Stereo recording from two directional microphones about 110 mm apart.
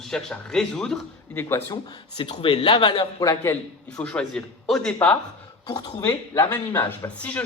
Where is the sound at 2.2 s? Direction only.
50° left (ahead or behind).